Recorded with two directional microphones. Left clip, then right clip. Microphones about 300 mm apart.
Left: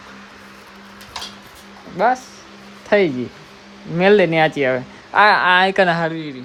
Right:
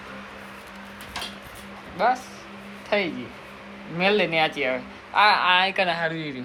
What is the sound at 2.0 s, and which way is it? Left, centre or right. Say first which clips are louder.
Speech: left 5 dB; left.